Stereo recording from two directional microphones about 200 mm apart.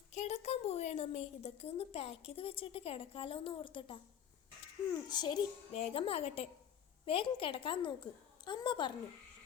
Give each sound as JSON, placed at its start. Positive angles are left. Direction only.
{"t": 0.1, "sound": "a woman's voice", "side_deg": 35}
{"t": 5.0, "sound": "a woman's voice", "side_deg": 20}